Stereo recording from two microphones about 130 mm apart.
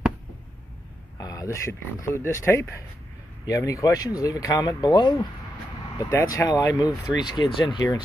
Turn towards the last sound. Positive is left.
turn(degrees=35)  # may be behind; listen again after turning